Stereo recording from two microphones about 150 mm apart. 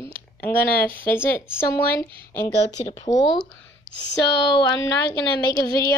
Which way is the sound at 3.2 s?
30° left (ahead or behind).